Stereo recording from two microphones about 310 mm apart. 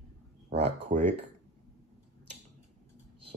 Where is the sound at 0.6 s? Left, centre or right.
Centre.